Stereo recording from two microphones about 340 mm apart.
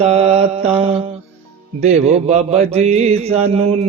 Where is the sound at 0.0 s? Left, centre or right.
Centre.